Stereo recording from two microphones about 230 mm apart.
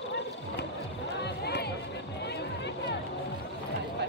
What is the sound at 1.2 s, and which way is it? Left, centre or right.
Run, left.